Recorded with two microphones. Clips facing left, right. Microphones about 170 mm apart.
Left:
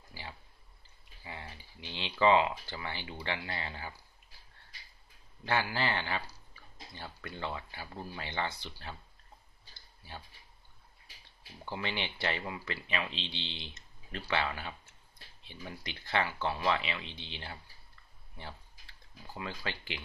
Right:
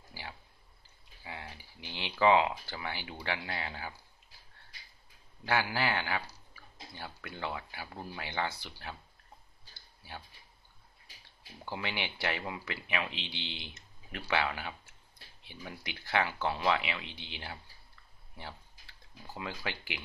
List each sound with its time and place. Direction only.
1.2 s a sound: 5° right (ahead or behind)
1.6 s a sound: 25° left (ahead or behind)
2.0 s speech: 15° right (ahead or behind)
5.4 s speech: 10° right (ahead or behind)
11.6 s speech: 10° right (ahead or behind)
15.8 s speech: 10° right (ahead or behind)
19.3 s speech: 15° right (ahead or behind)